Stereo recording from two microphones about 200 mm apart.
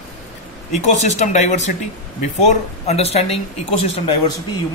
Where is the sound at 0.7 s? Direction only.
35° left (ahead or behind).